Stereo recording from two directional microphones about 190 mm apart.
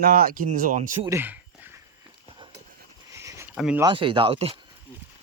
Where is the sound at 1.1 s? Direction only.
10° right (ahead or behind).